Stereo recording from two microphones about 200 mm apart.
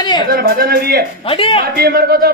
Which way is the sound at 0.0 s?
20° left (ahead or behind).